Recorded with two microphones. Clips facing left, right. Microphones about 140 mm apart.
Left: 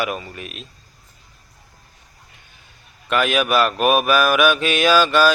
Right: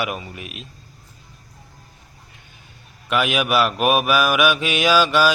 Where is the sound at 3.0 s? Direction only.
10° right (ahead or behind).